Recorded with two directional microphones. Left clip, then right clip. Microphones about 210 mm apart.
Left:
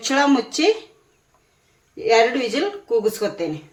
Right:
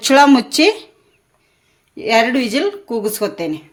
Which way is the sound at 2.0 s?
55° right (ahead or behind).